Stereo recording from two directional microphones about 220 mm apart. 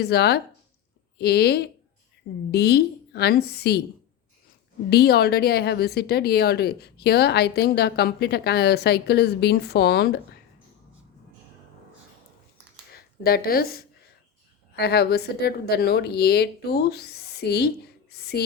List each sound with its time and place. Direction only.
0.0 s speech: 45° left (ahead or behind)
4.9 s speech: 45° left (ahead or behind)
12.9 s a woman's voice: 45° left (ahead or behind)